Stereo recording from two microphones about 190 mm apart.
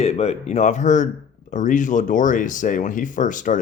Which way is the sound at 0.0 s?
35° left (ahead or behind).